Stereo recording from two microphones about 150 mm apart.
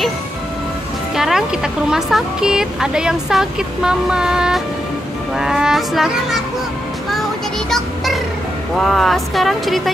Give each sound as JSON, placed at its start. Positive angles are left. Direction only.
{"t": 1.1, "sound": "speech", "side_deg": -5}
{"t": 7.7, "sound": "speech", "side_deg": 0}